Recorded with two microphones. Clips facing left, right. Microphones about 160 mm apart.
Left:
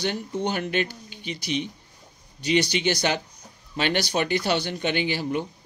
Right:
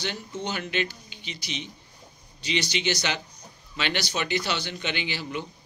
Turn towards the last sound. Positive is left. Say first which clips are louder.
# left 6 dB
turn(degrees=45)  # may be behind; listen again after turning